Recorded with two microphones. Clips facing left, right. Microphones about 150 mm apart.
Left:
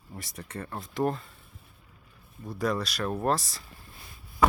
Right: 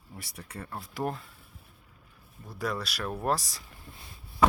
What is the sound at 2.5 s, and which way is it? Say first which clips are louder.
Speech: left 4 dB; 5° right (ahead or behind).